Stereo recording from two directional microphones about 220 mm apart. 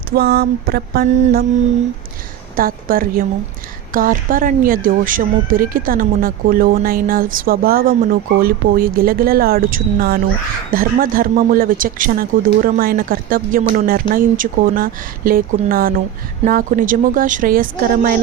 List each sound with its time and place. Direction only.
0.2 s mantra: 45° right (ahead or behind)
2.6 s speech: 40° right (ahead or behind)